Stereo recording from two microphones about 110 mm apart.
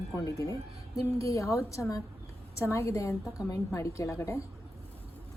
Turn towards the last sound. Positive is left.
turn(degrees=25)  # may be behind; listen again after turning